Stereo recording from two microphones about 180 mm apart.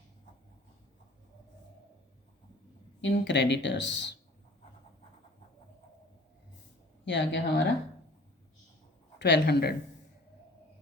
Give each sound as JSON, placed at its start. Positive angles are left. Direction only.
{"t": 3.0, "sound": "speech", "side_deg": 80}
{"t": 7.0, "sound": "speech", "side_deg": 80}
{"t": 9.1, "sound": "speech", "side_deg": 75}